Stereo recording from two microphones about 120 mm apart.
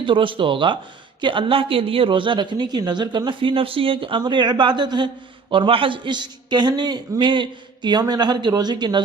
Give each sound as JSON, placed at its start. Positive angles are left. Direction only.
{"t": 0.0, "sound": "a woman's voice", "side_deg": -45}